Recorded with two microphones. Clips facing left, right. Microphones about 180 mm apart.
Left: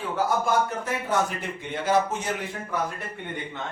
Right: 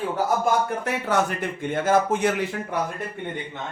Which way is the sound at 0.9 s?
70° right (ahead or behind).